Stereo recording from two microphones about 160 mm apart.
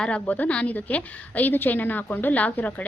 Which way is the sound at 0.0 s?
10° left (ahead or behind).